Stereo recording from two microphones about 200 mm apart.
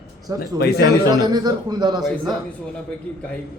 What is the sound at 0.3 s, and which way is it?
Speech, 50° left (ahead or behind).